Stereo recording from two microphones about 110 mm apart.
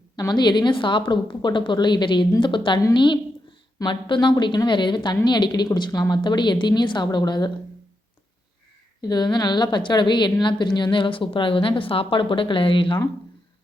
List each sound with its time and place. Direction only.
0.2 s a woman's voice: 40° left (ahead or behind)
9.0 s a woman's voice: 40° left (ahead or behind)